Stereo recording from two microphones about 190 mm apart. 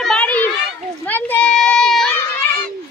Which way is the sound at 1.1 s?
10° left (ahead or behind).